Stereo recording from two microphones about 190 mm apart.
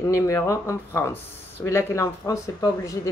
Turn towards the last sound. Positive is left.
turn(degrees=20)  # may be behind; listen again after turning